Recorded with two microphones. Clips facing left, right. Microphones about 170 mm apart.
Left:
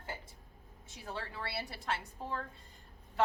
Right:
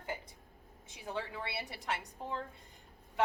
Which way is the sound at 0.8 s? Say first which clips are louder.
Right 3 dB; 15° right (ahead or behind).